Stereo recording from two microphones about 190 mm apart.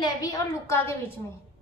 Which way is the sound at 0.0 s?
20° left (ahead or behind).